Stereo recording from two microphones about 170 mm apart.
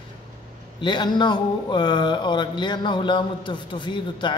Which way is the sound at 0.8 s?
25° left (ahead or behind).